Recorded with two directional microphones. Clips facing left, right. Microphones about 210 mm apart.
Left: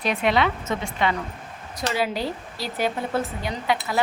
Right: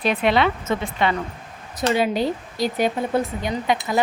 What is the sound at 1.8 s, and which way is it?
A woman's voice, 20° right (ahead or behind).